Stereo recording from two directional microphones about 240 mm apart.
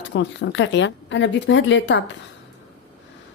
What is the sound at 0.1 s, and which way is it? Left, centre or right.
A woman's voice, left.